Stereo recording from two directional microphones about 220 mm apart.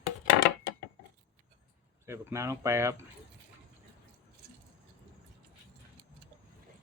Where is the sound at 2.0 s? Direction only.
10° right (ahead or behind).